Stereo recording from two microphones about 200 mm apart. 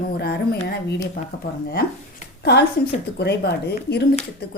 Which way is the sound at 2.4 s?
55° left (ahead or behind).